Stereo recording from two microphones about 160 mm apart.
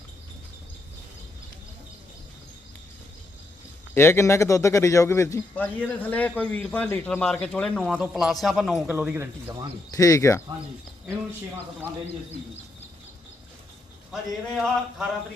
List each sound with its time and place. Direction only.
3.9 s a man's voice: 15° left (ahead or behind); by 9.1 s 5° right (ahead or behind)
9.1 s speech: 15° right (ahead or behind)
9.9 s speech: 20° left (ahead or behind)
14.1 s a man's voice: centre (ahead or behind)